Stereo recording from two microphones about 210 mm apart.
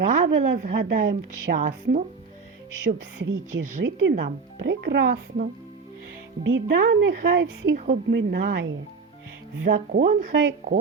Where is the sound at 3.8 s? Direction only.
60° right (ahead or behind).